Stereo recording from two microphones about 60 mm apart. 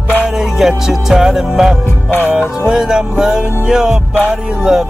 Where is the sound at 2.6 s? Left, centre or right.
Centre.